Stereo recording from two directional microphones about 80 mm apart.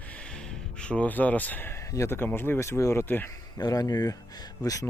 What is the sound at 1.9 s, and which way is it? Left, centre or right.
Speech, left.